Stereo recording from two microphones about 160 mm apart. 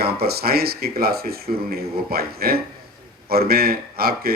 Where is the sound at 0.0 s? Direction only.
75° right (ahead or behind).